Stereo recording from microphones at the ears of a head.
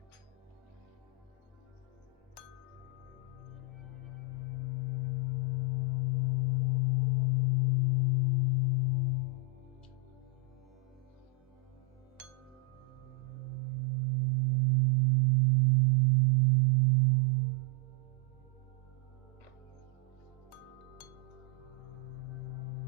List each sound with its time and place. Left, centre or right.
3.9 s singing bowl: left
13.3 s singing bowl: right
20.5 s music: left
22.1 s music: left